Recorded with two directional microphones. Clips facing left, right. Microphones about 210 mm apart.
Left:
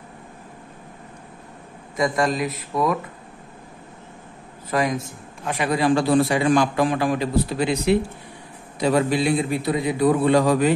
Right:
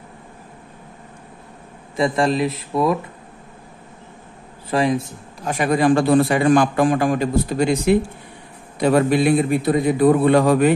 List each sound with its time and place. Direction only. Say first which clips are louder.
2.0 s a man's voice: right 3 dB; 30° right (ahead or behind)
4.6 s a man's voice: right 4 dB; 30° right (ahead or behind)
5.5 s a man's voice: right 3 dB; 45° right (ahead or behind)